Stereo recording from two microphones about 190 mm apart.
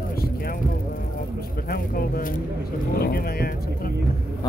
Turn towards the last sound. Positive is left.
turn(degrees=50)  # may be behind; listen again after turning